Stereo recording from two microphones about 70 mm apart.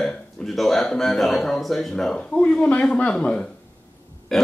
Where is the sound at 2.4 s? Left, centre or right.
Centre.